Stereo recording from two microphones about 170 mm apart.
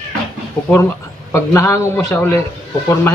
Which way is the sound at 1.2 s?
15° left (ahead or behind).